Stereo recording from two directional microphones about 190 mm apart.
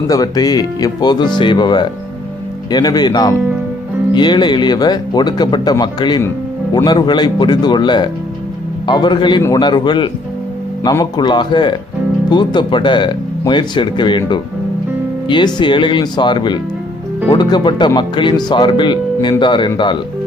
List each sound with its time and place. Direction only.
0.1 s speech: 20° left (ahead or behind)